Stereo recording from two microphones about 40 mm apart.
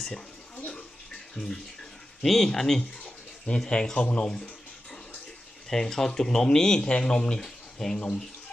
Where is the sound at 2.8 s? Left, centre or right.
Left.